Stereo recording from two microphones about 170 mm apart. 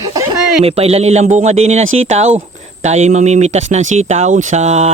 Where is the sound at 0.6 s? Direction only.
35° right (ahead or behind).